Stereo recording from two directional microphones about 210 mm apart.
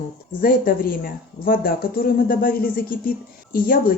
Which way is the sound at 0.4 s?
45° left (ahead or behind).